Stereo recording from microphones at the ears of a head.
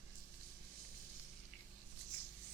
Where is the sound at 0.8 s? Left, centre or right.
Right.